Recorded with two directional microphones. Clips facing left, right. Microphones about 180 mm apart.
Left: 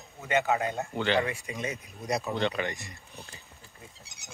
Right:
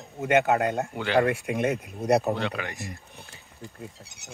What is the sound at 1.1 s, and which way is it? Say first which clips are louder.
Speech: right 6 dB; 60° right (ahead or behind).